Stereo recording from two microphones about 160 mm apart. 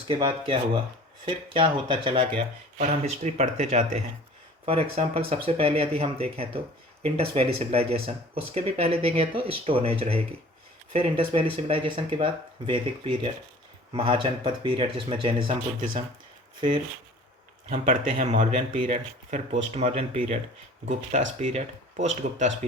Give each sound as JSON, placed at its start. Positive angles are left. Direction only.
{"t": 0.1, "sound": "speech", "side_deg": -30}
{"t": 2.8, "sound": "speech", "side_deg": -45}
{"t": 17.7, "sound": "speech", "side_deg": -55}